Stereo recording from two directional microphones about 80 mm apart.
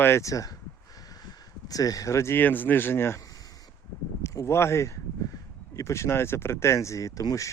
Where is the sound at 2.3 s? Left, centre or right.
Left.